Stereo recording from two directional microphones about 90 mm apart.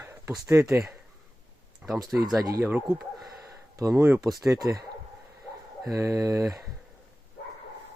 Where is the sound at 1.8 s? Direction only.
15° right (ahead or behind).